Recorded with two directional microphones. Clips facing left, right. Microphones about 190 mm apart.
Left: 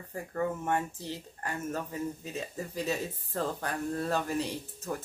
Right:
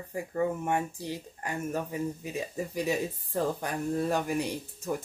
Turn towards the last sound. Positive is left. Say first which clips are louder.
# right 3 dB
turn(degrees=-15)  # may be behind; listen again after turning